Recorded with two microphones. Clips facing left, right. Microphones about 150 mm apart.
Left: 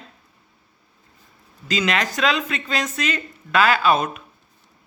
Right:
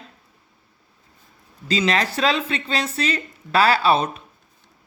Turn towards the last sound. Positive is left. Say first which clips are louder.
# even
turn(degrees=-30)  # may be behind; listen again after turning